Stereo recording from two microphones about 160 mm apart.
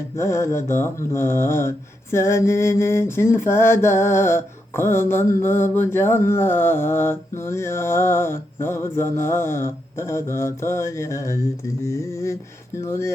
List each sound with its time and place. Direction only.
0.2 s mantra: 15° left (ahead or behind)
11.9 s a sound: 20° left (ahead or behind)
12.8 s mantra: 15° left (ahead or behind)